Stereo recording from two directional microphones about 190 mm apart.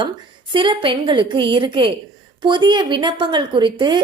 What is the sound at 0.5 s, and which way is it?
Speech, 25° right (ahead or behind).